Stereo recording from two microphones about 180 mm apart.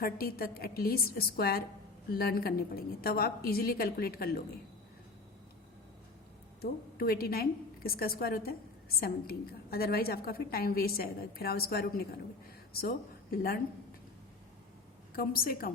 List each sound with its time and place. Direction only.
0.0 s a woman's voice: 55° left (ahead or behind)
6.6 s a woman's voice: 60° left (ahead or behind)
15.1 s a woman's voice: 55° left (ahead or behind)